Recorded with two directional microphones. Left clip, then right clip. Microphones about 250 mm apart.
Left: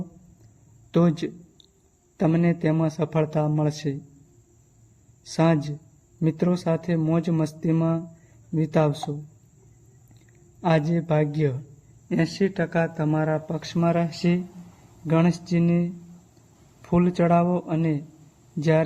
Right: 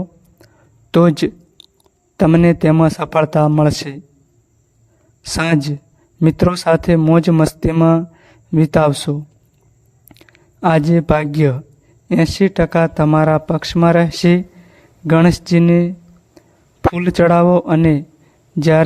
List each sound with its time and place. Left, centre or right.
0.9 s a sound: right
2.1 s speech: right
5.2 s speech: right
10.2 s speech: right
16.9 s speech: right